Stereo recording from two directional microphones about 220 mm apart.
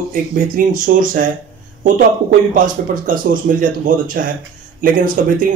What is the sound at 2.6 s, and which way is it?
Speech, 35° right (ahead or behind).